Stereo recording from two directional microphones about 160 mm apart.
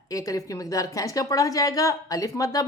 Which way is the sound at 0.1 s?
20° left (ahead or behind).